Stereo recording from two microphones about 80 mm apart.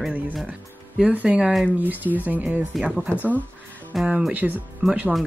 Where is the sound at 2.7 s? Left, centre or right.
Centre.